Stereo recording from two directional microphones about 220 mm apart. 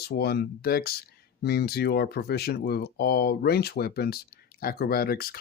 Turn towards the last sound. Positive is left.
turn(degrees=45)  # may be behind; listen again after turning